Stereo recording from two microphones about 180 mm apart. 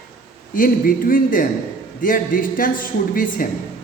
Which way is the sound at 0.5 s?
50° left (ahead or behind).